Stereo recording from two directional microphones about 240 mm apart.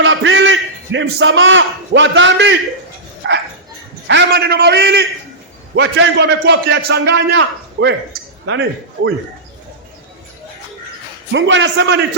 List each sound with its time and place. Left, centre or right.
0.0 s a man's voice: right
3.2 s dog: right
4.0 s a man's voice: right
11.3 s a man's voice: right